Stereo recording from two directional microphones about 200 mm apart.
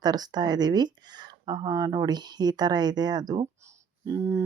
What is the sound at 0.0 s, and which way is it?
Speech, 20° right (ahead or behind).